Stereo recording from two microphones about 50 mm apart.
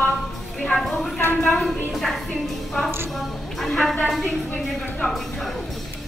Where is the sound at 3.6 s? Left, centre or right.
Centre.